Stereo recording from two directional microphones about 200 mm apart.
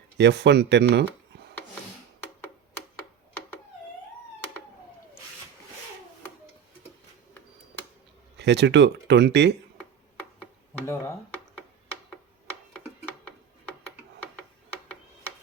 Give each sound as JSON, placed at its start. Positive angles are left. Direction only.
{"t": 0.2, "sound": "speech", "side_deg": -60}
{"t": 2.9, "sound": "typewriter", "side_deg": 10}
{"t": 8.4, "sound": "speech", "side_deg": -60}
{"t": 10.8, "sound": "speech", "side_deg": 15}